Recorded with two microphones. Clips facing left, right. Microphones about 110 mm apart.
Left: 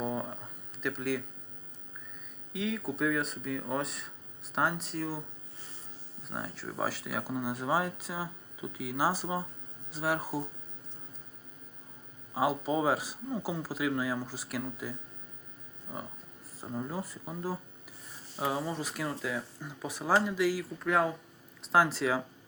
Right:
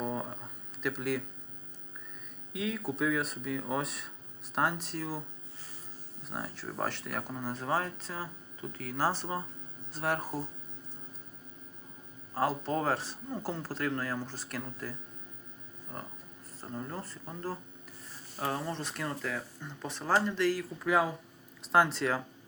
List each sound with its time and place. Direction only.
0.0 s a sound: centre (ahead or behind)
2.5 s speech: centre (ahead or behind)
6.2 s speech: centre (ahead or behind)
12.3 s speech: 10° left (ahead or behind)